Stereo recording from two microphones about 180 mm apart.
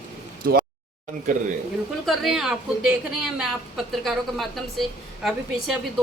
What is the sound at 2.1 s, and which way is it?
A woman's voice, centre (ahead or behind).